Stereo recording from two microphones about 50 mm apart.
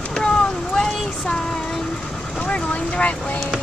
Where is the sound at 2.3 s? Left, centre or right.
Left.